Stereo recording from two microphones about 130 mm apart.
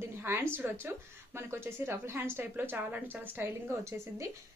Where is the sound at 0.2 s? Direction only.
20° right (ahead or behind).